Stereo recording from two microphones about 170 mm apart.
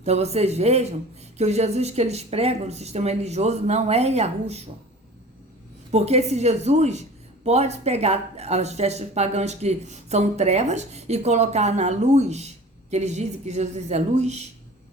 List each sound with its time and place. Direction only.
0.0 s a woman's voice: 40° right (ahead or behind)
5.9 s a woman's voice: 40° right (ahead or behind)